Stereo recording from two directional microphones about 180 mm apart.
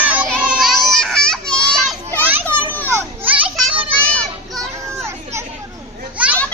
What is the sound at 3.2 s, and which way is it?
Children playing, 10° right (ahead or behind).